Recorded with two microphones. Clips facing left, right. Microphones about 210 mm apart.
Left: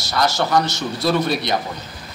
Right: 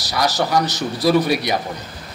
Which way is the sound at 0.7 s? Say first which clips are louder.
Right 1 dB; 35° right (ahead or behind).